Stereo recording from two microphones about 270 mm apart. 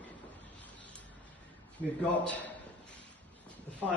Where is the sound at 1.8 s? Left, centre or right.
Centre.